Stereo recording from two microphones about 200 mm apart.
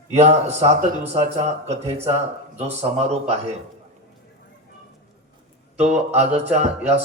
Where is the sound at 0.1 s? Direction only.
35° right (ahead or behind).